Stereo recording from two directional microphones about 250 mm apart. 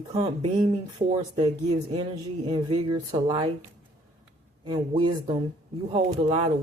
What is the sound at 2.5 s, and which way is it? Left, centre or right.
Speech, centre.